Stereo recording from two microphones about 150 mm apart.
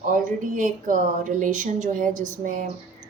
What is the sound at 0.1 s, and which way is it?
Speech, 60° right (ahead or behind).